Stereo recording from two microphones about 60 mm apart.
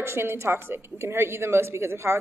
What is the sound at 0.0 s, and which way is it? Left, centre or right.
A woman's voice, right.